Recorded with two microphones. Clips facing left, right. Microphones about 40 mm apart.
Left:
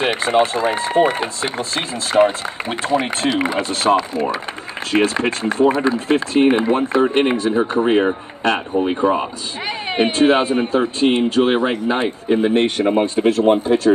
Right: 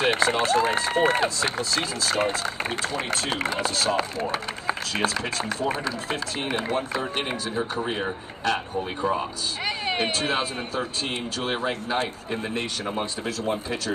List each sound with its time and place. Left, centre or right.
0.0 s run: left
0.7 s speech: left
3.9 s speech: left
4.9 s speech: left
13.9 s speech: left